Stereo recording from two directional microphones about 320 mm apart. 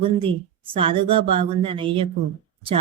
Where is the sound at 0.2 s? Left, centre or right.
Centre.